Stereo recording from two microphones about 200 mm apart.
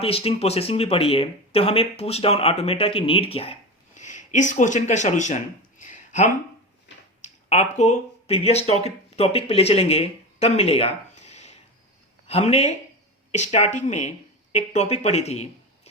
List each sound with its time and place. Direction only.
0.0 s speech: 30° left (ahead or behind)
5.8 s a sound: 40° left (ahead or behind)
7.2 s speech: 35° left (ahead or behind)